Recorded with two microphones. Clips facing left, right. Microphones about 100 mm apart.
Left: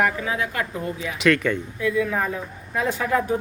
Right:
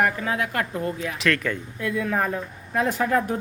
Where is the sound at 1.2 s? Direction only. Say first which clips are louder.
Left 5 dB; centre (ahead or behind).